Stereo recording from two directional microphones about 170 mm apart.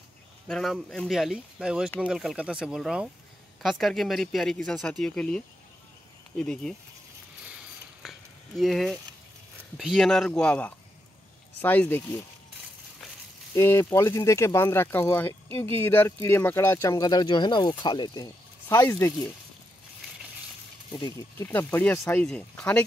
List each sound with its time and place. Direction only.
0.5 s speech: centre (ahead or behind)
7.4 s a sound: 5° right (ahead or behind)
9.8 s speech: centre (ahead or behind)
13.6 s speech: 15° left (ahead or behind)
21.4 s speech: 10° left (ahead or behind)